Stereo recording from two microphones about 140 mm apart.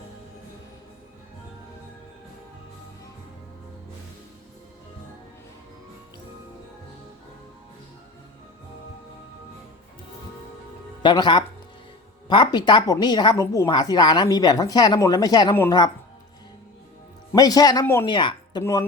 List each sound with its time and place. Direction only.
11.0 s a woman's voice: 30° left (ahead or behind)
17.3 s speech: 30° left (ahead or behind)
18.6 s speech: 20° left (ahead or behind)